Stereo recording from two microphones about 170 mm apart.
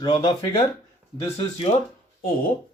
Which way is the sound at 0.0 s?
20° left (ahead or behind).